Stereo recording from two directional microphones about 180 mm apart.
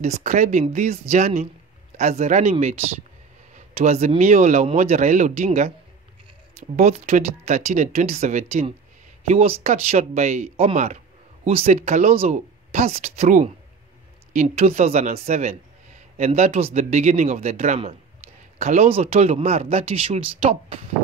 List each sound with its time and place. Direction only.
0.0 s speech: 40° right (ahead or behind)
3.5 s speech: 40° right (ahead or behind)
6.8 s speech: 40° right (ahead or behind)